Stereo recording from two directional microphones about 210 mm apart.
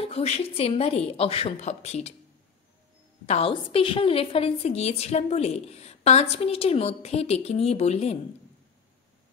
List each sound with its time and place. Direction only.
0.0 s a woman's voice: 30° left (ahead or behind)
3.3 s a woman's voice: 25° left (ahead or behind)